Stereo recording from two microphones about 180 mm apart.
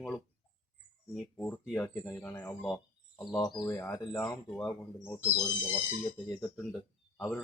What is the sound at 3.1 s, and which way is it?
Speech, 20° left (ahead or behind).